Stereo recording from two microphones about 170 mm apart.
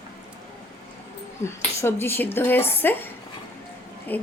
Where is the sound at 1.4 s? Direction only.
15° left (ahead or behind).